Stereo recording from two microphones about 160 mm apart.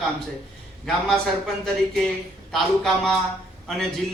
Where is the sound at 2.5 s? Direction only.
Centre (ahead or behind).